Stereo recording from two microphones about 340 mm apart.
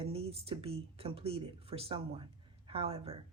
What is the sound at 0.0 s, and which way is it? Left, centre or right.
Speech, centre.